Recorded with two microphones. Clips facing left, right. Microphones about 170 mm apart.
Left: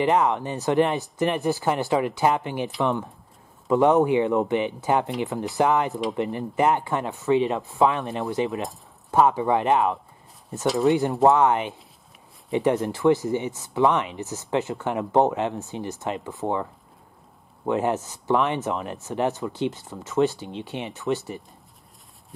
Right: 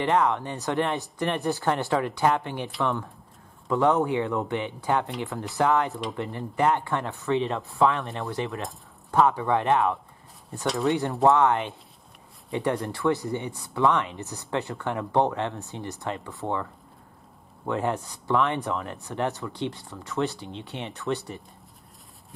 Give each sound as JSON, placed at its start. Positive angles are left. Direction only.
{"t": 0.0, "sound": "speech", "side_deg": 10}
{"t": 0.7, "sound": "speech", "side_deg": 20}
{"t": 1.2, "sound": "speech", "side_deg": 5}
{"t": 2.8, "sound": "speech", "side_deg": 20}
{"t": 5.9, "sound": "speech", "side_deg": 0}
{"t": 6.1, "sound": "speech", "side_deg": 15}
{"t": 10.7, "sound": "speech", "side_deg": 0}
{"t": 11.2, "sound": "speech", "side_deg": 20}
{"t": 13.2, "sound": "speech", "side_deg": 5}
{"t": 13.6, "sound": "speech", "side_deg": 15}
{"t": 17.6, "sound": "speech", "side_deg": 15}